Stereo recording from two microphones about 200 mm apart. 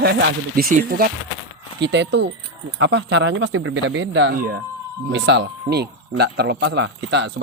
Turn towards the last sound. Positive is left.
turn(degrees=-60)  # may be behind; listen again after turning